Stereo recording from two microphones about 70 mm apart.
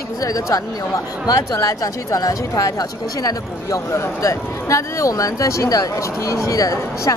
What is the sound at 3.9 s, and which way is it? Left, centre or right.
Speech, left.